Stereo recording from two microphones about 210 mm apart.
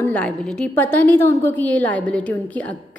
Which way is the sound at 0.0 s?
5° left (ahead or behind).